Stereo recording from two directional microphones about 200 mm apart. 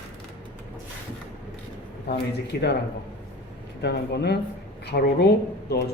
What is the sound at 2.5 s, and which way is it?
Speech, 55° left (ahead or behind).